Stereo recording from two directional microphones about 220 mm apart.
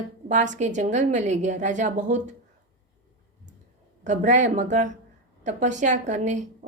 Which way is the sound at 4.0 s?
35° right (ahead or behind).